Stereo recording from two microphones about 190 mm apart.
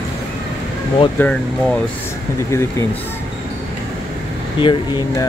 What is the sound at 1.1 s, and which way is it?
Speech, 5° left (ahead or behind).